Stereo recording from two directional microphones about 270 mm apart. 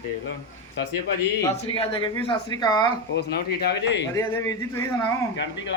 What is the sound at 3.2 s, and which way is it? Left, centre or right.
Speech, left.